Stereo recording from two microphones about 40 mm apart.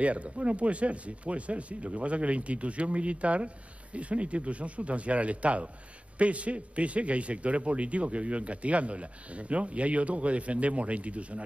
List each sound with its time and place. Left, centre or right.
0.0 s speech: right